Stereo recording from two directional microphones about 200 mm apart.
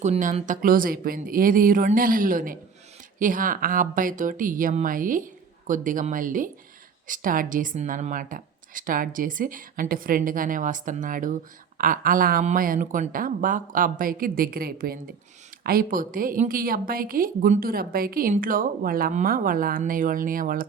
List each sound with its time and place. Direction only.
0.0 s a woman's voice: 40° right (ahead or behind)